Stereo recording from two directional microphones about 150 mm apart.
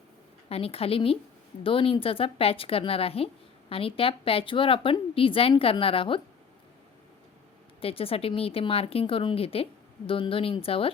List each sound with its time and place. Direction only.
0.4 s a woman's voice: 40° left (ahead or behind)
7.8 s a woman's voice: 40° left (ahead or behind)